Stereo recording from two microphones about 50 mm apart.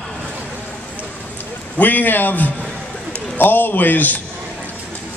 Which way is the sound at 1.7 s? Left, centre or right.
Left.